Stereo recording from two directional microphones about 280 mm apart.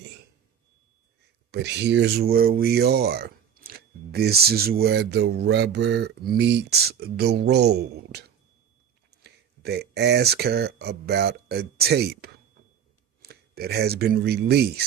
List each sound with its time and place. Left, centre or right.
1.5 s speech: right
9.2 s speech: right